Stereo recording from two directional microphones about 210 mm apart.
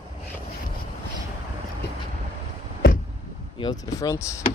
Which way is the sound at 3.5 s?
20° left (ahead or behind).